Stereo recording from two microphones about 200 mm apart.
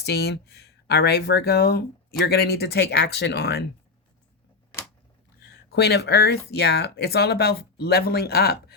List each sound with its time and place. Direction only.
0.0 s speech: 55° left (ahead or behind)
5.4 s speech: 55° left (ahead or behind)